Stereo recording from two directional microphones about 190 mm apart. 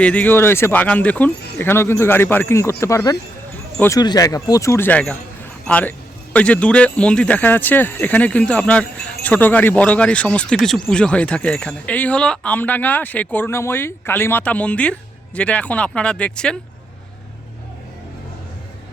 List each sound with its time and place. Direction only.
0.0 s speech: 5° left (ahead or behind)